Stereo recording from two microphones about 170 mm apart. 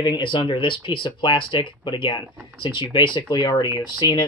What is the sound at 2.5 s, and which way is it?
Speech, 30° left (ahead or behind).